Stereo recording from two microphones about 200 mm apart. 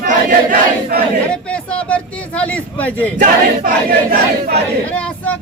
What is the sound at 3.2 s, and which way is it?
Choir, 45° right (ahead or behind).